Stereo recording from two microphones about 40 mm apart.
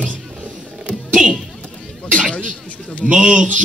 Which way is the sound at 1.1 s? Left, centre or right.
Centre.